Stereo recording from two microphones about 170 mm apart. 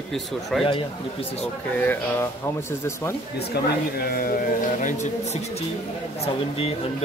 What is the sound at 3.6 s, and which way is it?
Speech, 70° left (ahead or behind).